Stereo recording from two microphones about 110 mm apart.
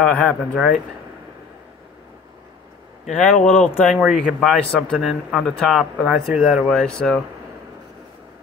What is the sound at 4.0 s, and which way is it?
Speech, 10° right (ahead or behind).